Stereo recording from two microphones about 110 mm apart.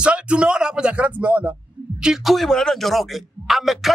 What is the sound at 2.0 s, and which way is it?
A man's voice, 5° right (ahead or behind).